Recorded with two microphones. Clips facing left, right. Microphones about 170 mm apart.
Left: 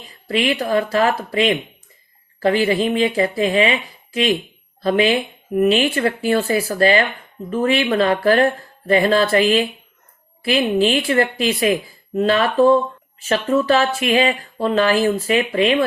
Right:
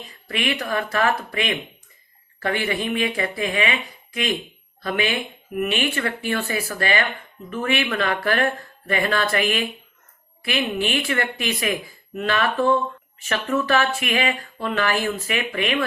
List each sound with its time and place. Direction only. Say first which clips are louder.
0.3 s speech: left 6 dB; 30° left (ahead or behind)